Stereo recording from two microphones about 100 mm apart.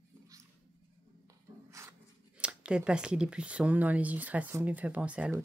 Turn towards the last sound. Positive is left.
turn(degrees=-15)  # may be behind; listen again after turning